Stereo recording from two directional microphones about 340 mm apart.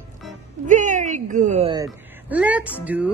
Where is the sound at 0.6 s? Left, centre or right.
Right.